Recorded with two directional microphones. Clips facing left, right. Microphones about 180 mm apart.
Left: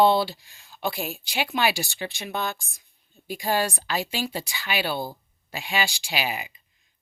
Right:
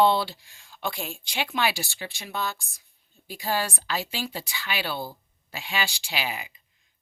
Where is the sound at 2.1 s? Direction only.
60° left (ahead or behind).